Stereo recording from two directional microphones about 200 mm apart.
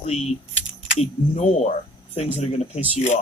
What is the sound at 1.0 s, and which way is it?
Speech, 35° left (ahead or behind).